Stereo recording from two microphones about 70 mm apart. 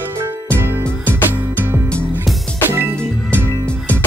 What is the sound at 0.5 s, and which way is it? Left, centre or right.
Music, right.